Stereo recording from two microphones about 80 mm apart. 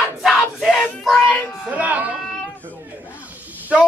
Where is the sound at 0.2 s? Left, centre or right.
Centre.